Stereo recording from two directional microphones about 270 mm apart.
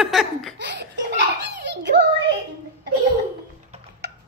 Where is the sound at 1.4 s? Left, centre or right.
Right.